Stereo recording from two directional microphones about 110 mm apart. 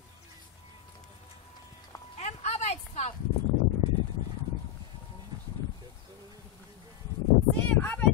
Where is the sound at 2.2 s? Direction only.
90° left.